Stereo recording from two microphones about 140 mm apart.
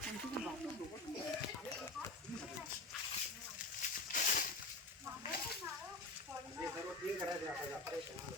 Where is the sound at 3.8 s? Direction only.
75° left (ahead or behind).